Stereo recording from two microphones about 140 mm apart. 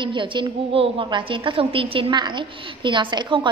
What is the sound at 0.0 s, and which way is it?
A woman's voice, 35° right (ahead or behind).